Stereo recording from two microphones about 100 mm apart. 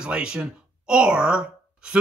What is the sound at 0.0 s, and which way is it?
Speech, 10° right (ahead or behind).